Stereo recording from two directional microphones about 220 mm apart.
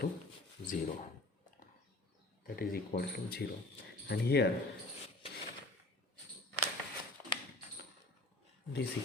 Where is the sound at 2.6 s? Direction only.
45° left (ahead or behind).